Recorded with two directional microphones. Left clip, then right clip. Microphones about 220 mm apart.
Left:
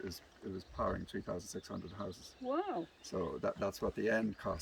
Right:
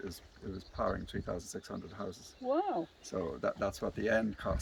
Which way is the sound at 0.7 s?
15° right (ahead or behind).